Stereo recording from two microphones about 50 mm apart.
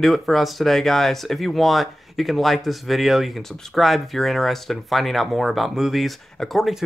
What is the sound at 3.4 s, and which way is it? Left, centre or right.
Speech, centre.